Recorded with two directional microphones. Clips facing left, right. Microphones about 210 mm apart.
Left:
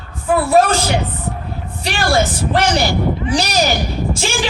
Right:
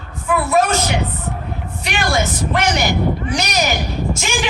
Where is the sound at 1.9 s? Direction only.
35° left (ahead or behind).